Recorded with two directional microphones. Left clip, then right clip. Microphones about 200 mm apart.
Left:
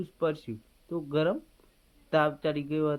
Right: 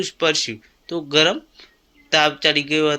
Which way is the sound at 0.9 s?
20° right (ahead or behind).